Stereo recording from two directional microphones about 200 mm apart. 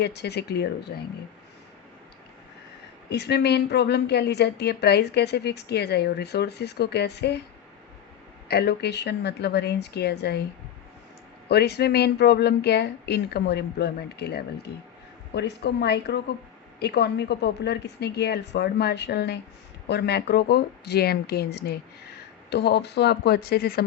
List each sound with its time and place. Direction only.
0.0 s a woman's voice: 55° left (ahead or behind)
3.1 s a woman's voice: 55° left (ahead or behind)
8.4 s a woman's voice: 55° left (ahead or behind)
11.4 s a woman's voice: 55° left (ahead or behind)